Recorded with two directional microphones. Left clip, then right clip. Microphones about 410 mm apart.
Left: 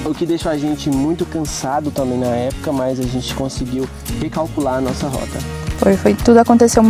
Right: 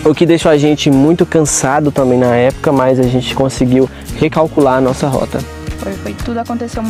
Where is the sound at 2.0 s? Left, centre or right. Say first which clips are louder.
Right 8 dB; right.